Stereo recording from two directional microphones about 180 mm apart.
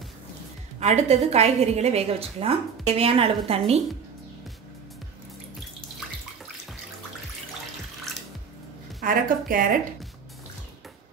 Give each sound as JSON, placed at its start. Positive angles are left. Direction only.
{"t": 0.7, "sound": "a woman's voice", "side_deg": -35}
{"t": 9.0, "sound": "speech", "side_deg": -50}